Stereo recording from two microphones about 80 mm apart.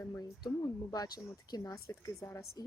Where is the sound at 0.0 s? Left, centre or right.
Left.